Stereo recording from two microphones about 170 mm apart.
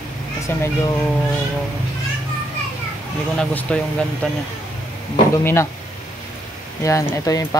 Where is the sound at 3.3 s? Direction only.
5° left (ahead or behind).